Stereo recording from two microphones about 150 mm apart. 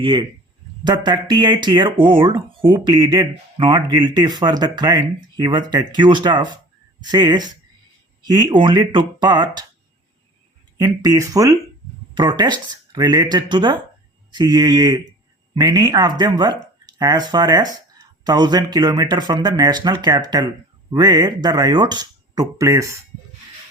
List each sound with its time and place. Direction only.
0.0 s speech: 30° right (ahead or behind)
10.8 s speech: 25° right (ahead or behind)